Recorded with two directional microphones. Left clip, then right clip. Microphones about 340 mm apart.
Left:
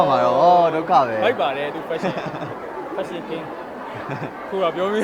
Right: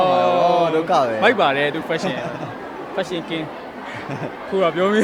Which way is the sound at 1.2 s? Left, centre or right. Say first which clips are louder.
Right 4 dB; right.